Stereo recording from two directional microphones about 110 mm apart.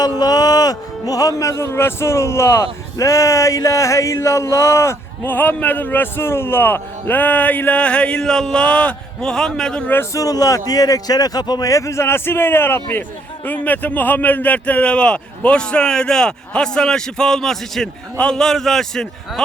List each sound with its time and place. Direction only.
0.0 s speech: 35° left (ahead or behind); by 9.9 s 5° left (ahead or behind)
9.9 s a man's voice: 25° left (ahead or behind); by 19.0 s 5° left (ahead or behind)